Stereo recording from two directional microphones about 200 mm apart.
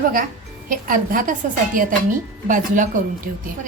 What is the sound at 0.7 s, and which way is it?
A woman's voice, 45° right (ahead or behind).